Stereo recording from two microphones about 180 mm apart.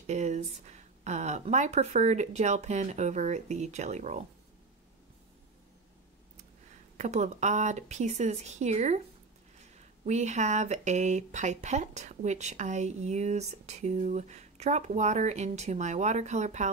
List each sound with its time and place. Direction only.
0.0 s speech: 40° right (ahead or behind)
7.0 s speech: 40° right (ahead or behind)
10.0 s speech: 40° right (ahead or behind)